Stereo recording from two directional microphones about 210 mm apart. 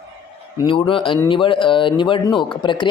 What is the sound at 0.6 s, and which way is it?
A man's voice, 25° left (ahead or behind).